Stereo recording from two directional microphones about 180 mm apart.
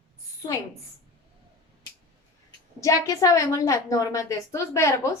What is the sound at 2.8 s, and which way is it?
A woman's voice, 20° left (ahead or behind).